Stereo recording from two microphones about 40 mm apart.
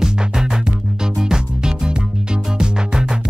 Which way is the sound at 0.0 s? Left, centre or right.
Centre.